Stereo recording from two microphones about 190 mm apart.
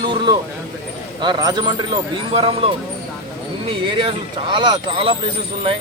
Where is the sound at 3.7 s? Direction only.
25° right (ahead or behind).